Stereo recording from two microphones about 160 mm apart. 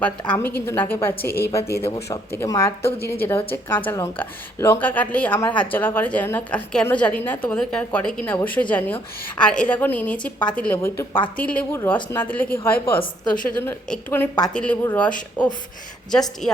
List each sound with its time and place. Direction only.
0.0 s a woman's voice: 15° left (ahead or behind)